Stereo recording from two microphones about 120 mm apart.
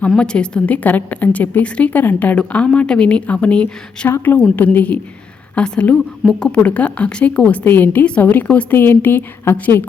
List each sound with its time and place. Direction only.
0.2 s a woman's voice: 10° left (ahead or behind)